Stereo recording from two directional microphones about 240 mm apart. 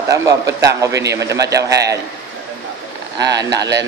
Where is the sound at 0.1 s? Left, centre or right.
Centre.